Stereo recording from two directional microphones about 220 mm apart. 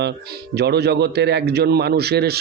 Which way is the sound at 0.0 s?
50° right (ahead or behind).